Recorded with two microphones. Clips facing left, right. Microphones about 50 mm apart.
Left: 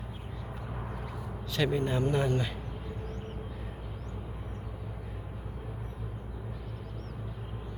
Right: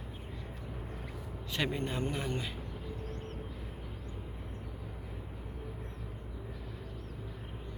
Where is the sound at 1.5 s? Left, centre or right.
Right.